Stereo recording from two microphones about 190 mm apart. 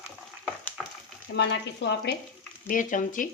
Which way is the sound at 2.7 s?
45° left (ahead or behind).